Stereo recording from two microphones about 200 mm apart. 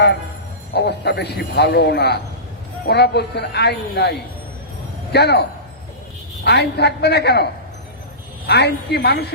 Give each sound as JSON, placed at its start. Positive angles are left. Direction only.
{"t": 0.7, "sound": "speech", "side_deg": 55}
{"t": 5.1, "sound": "speech", "side_deg": 55}
{"t": 8.4, "sound": "speech", "side_deg": 55}